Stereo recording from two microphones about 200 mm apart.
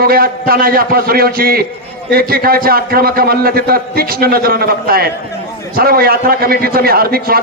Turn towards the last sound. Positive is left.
turn(degrees=-50)  # may be behind; listen again after turning